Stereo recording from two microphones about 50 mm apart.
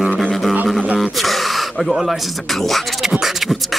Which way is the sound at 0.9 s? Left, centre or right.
Centre.